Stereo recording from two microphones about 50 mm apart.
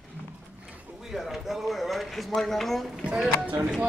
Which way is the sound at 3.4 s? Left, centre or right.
Right.